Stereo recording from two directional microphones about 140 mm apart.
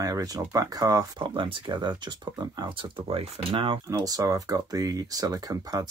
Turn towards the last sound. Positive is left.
turn(degrees=-25)  # may be behind; listen again after turning